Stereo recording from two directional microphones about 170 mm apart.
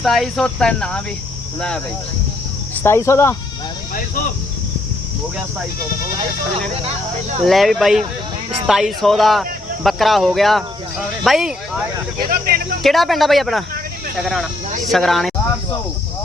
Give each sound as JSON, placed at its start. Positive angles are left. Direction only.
{"t": 0.0, "sound": "speech", "side_deg": 0}
{"t": 2.8, "sound": "speech", "side_deg": 15}
{"t": 7.4, "sound": "speech", "side_deg": 0}
{"t": 12.3, "sound": "speech", "side_deg": -60}
{"t": 12.8, "sound": "speech", "side_deg": 0}